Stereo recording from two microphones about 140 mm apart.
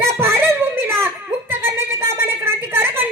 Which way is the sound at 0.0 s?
20° right (ahead or behind).